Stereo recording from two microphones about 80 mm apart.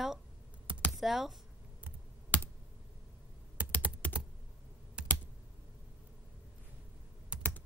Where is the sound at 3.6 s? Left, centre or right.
Centre.